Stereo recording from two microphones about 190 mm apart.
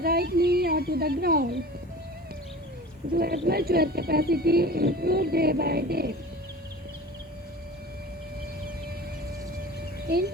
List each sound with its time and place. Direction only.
0.0 s speech: 55° right (ahead or behind)
3.2 s speech: 55° right (ahead or behind)
10.1 s speech: 55° right (ahead or behind)